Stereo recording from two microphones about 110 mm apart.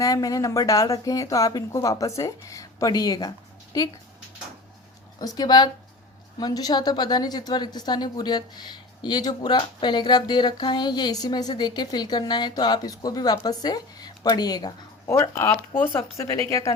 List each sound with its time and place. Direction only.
0.0 s a woman's voice: 30° left (ahead or behind)
5.2 s a woman's voice: 35° left (ahead or behind)
15.0 s speech: 25° left (ahead or behind)